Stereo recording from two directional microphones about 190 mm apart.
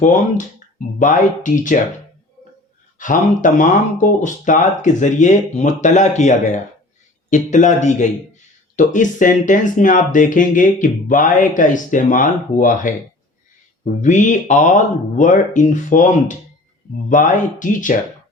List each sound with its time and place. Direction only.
0.0 s speech: 40° left (ahead or behind)
3.0 s speech: 45° left (ahead or behind)
14.0 s speech: 40° left (ahead or behind)